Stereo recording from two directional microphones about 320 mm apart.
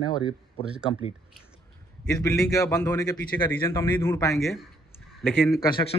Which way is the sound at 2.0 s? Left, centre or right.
Centre.